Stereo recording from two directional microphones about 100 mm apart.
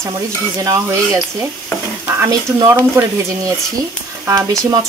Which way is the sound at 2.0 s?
25° right (ahead or behind).